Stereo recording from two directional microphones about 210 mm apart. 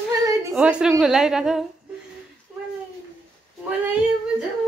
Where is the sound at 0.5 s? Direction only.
5° right (ahead or behind).